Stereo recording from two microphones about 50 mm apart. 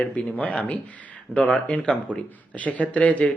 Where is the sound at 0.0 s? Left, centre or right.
Left.